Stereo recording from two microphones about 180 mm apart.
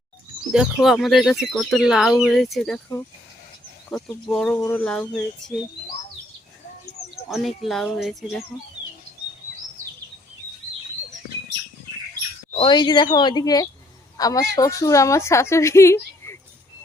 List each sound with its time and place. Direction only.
0.5 s speech: centre (ahead or behind)
3.8 s speech: 5° left (ahead or behind)
7.3 s speech: centre (ahead or behind)
12.5 s a woman's voice: 25° left (ahead or behind)